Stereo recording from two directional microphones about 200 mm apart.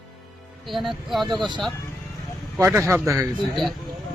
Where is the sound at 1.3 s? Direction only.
20° right (ahead or behind).